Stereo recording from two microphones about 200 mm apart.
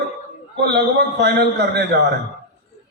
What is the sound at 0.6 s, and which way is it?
A man's voice, 55° right (ahead or behind).